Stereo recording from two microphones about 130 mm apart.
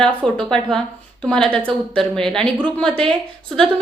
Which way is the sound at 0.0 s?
5° left (ahead or behind).